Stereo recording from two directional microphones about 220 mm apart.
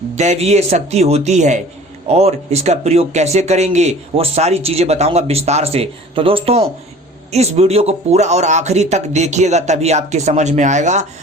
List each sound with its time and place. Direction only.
0.2 s speech: 30° right (ahead or behind)